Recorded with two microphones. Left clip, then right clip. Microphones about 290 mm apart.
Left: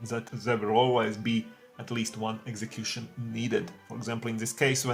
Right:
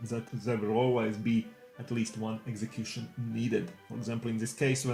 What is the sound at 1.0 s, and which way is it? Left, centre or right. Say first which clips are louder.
Speech: left 3 dB; left.